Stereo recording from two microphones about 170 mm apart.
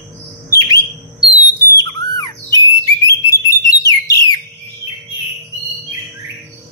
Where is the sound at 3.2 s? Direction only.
20° left (ahead or behind).